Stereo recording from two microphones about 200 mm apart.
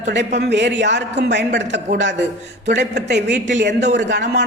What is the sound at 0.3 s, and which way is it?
A man's voice, 60° right (ahead or behind).